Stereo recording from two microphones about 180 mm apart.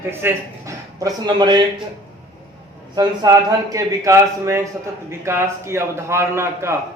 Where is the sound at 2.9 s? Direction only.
20° right (ahead or behind).